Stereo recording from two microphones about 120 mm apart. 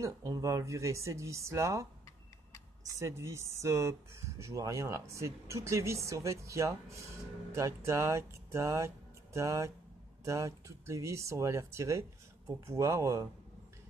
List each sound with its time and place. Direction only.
0.0 s speech: 25° right (ahead or behind)
3.0 s speech: 25° right (ahead or behind)